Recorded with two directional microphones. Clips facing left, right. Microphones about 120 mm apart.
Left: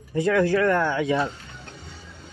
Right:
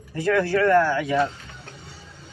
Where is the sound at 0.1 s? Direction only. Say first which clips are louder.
Left 1 dB; 15° left (ahead or behind).